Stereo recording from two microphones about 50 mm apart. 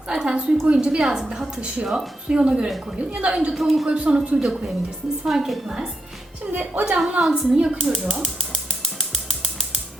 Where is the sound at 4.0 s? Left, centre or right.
Right.